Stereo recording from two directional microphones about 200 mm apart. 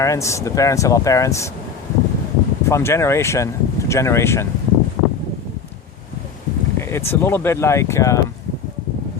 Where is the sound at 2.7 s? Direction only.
15° left (ahead or behind).